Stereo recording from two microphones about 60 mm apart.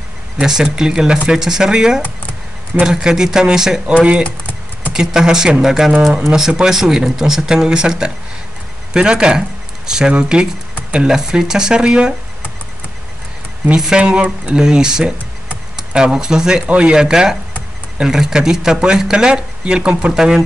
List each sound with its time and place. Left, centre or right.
0.4 s speech: centre
3.8 s speech: right
4.9 s speech: centre
13.7 s speech: centre